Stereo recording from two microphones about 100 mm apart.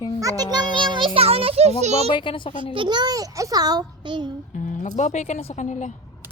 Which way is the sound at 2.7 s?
50° right (ahead or behind).